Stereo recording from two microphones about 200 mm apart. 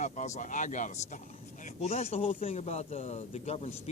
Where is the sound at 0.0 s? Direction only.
35° left (ahead or behind).